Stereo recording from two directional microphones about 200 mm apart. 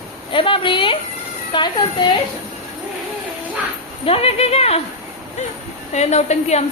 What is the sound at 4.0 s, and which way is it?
Speech, 30° left (ahead or behind).